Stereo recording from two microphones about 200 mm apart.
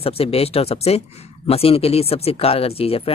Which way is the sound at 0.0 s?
30° left (ahead or behind).